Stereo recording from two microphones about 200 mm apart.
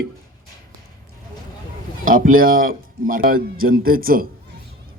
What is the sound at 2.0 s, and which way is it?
A man's voice, 45° right (ahead or behind).